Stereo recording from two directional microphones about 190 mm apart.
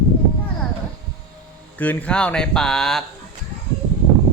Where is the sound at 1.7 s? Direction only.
10° left (ahead or behind).